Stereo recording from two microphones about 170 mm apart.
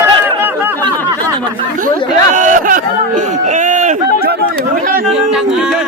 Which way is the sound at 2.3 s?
50° right (ahead or behind).